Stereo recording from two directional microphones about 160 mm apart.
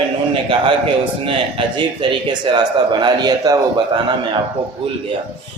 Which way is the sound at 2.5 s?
25° right (ahead or behind).